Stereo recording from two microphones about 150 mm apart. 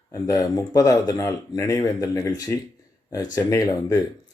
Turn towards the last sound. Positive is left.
turn(degrees=20)  # may be behind; listen again after turning